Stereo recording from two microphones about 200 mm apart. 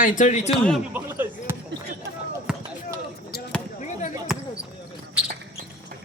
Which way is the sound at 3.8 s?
35° left (ahead or behind).